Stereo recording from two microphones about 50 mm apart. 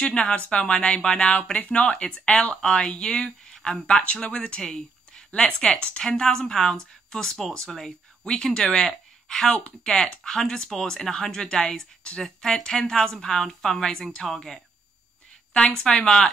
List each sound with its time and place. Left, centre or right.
0.0 s speech: left
3.8 s speech: left; by 14.6 s centre
15.8 s speech: left